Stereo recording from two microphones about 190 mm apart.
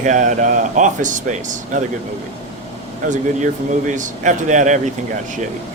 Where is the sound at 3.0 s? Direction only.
40° right (ahead or behind).